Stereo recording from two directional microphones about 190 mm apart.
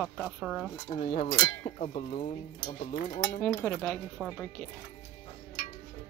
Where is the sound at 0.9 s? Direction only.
40° left (ahead or behind).